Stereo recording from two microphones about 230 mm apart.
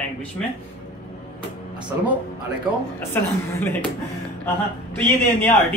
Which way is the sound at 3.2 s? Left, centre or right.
Centre.